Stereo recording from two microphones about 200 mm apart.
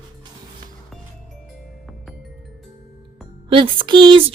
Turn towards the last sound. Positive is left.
turn(degrees=-25)  # may be behind; listen again after turning